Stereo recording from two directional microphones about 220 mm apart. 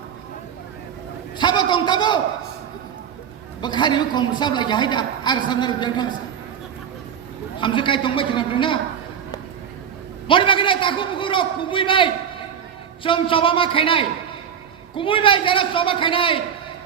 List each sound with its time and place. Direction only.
1.4 s a man's voice: 20° left (ahead or behind)
3.6 s a woman's voice: 20° left (ahead or behind)
7.6 s a woman's voice: 20° left (ahead or behind)
10.2 s a woman's voice: 20° left (ahead or behind)